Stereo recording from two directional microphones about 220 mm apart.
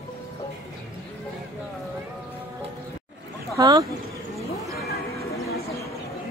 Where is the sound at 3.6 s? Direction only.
15° right (ahead or behind).